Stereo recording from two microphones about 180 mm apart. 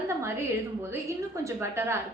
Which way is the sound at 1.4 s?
15° right (ahead or behind).